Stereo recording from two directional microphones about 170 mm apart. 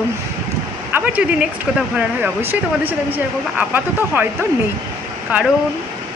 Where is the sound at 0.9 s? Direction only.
10° right (ahead or behind).